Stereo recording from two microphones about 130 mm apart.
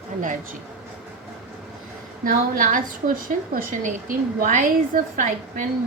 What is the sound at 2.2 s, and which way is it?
A woman's voice, 90° right.